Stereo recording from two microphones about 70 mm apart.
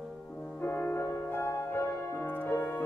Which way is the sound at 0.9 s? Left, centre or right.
Left.